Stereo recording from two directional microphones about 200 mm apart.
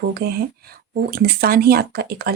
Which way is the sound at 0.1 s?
50° right (ahead or behind).